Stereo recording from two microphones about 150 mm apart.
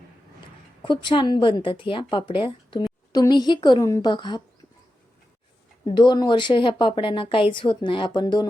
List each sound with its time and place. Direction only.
0.9 s speech: 30° left (ahead or behind)
5.8 s speech: 30° left (ahead or behind)